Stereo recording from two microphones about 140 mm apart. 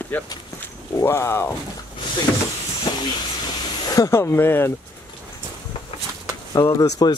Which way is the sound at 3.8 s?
25° left (ahead or behind).